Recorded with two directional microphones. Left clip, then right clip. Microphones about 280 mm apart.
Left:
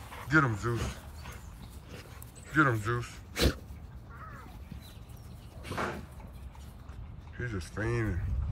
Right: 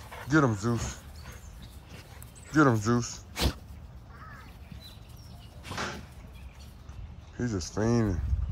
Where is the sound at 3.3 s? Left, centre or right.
Centre.